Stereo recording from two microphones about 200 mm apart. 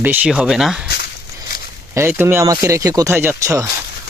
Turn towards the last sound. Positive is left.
turn(degrees=-15)  # may be behind; listen again after turning